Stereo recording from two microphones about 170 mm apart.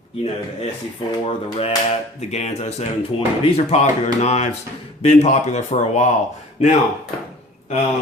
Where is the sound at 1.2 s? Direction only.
35° left (ahead or behind).